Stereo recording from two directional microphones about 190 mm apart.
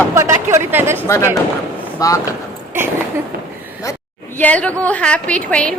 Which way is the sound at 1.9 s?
20° left (ahead or behind).